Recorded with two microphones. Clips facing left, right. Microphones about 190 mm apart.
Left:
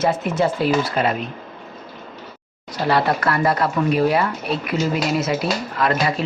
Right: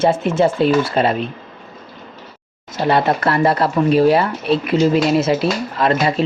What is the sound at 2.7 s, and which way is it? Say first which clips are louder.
Speech: right 3 dB; 25° right (ahead or behind).